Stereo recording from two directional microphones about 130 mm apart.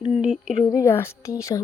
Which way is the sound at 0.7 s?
20° left (ahead or behind).